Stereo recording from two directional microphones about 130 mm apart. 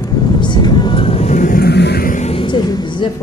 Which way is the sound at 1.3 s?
75° left (ahead or behind).